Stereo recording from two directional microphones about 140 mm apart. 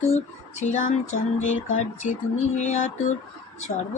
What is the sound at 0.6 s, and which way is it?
Speech, 60° left (ahead or behind).